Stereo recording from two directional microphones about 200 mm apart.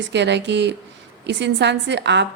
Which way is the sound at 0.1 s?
60° right (ahead or behind).